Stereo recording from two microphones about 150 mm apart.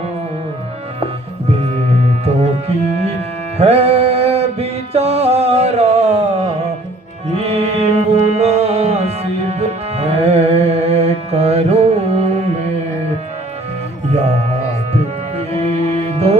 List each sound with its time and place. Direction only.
2.2 s music: 45° right (ahead or behind)
14.1 s music: 45° right (ahead or behind)
15.4 s music: 45° right (ahead or behind)